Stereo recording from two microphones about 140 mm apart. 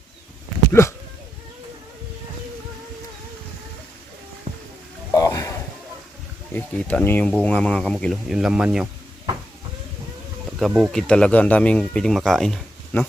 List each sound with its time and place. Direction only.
0.7 s speech: 20° left (ahead or behind)
5.1 s a sound: 25° left (ahead or behind)
6.5 s speech: 10° left (ahead or behind); by 8.9 s 5° right (ahead or behind)
10.6 s speech: 5° right (ahead or behind)